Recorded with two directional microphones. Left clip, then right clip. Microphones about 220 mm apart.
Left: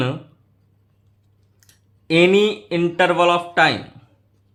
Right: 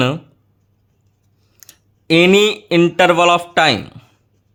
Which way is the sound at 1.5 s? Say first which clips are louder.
Right 10 dB; 50° right (ahead or behind).